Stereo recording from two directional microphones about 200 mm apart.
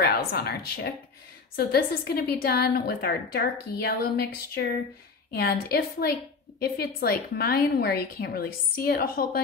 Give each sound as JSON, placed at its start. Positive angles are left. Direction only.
{"t": 0.0, "sound": "a woman's voice", "side_deg": 50}